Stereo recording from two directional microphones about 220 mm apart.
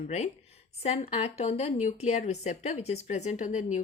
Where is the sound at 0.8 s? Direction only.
30° left (ahead or behind).